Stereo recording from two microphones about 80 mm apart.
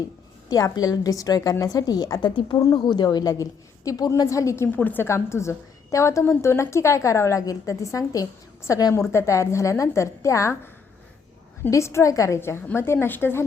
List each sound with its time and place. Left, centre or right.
0.5 s a woman's voice: left
4.7 s a woman's voice: left
5.0 s a woman's voice: left
11.7 s a woman's voice: left
12.4 s a woman's voice: left